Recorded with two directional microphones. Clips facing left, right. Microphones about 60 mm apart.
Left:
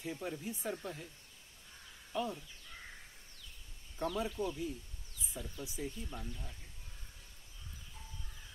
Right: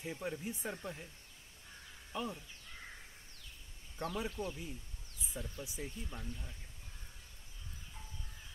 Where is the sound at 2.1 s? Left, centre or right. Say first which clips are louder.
Left 3 dB; centre.